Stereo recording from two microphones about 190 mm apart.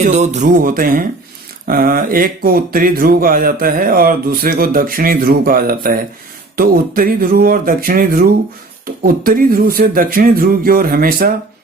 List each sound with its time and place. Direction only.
0.0 s speech: 35° right (ahead or behind)